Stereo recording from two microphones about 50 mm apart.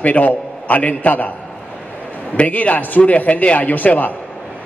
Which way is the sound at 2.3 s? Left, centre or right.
Left.